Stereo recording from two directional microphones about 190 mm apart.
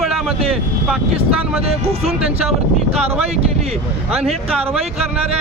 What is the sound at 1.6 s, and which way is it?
Speech, 30° right (ahead or behind).